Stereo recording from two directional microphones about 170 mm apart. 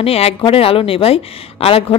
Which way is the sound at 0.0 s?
35° left (ahead or behind).